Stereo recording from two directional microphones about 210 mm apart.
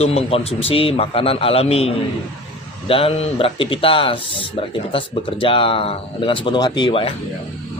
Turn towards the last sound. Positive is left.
turn(degrees=25)  # may be behind; listen again after turning